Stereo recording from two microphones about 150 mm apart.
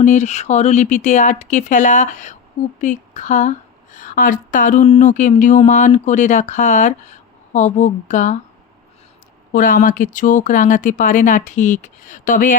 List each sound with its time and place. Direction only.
0.0 s speech: 50° left (ahead or behind)
9.5 s speech: 65° left (ahead or behind)